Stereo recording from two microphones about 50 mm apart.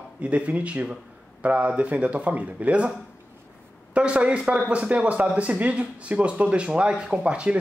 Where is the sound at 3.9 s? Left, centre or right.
Right.